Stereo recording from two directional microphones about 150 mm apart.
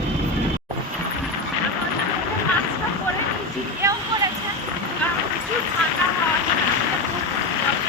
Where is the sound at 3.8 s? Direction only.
20° right (ahead or behind).